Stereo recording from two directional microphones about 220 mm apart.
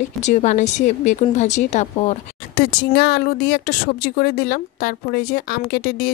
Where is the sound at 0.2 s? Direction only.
30° left (ahead or behind).